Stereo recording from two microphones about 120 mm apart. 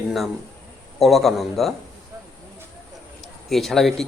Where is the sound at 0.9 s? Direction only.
Centre (ahead or behind).